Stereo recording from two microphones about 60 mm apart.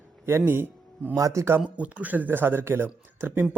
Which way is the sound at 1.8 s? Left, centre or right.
Right.